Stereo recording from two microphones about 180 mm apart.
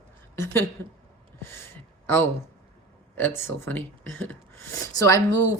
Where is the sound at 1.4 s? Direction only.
15° left (ahead or behind).